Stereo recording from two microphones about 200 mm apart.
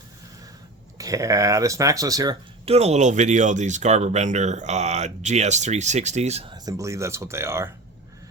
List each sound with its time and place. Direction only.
0.9 s speech: 15° right (ahead or behind)
2.6 s speech: 30° right (ahead or behind); by 7.7 s 15° right (ahead or behind)